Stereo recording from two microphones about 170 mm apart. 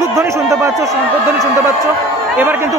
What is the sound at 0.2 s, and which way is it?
Speech, 15° right (ahead or behind).